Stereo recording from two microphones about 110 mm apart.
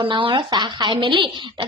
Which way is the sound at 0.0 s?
50° right (ahead or behind).